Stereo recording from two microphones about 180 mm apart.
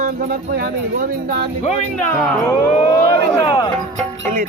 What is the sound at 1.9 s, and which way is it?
Speech, centre (ahead or behind).